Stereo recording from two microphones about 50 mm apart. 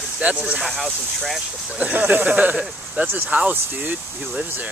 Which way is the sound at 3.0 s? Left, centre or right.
Right.